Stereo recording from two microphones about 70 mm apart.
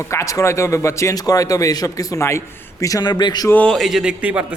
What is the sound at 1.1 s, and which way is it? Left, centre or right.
A man's voice, left.